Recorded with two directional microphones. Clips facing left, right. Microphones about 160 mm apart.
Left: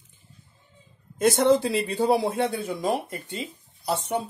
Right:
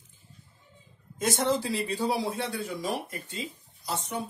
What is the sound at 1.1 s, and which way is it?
A man's voice, 60° left (ahead or behind).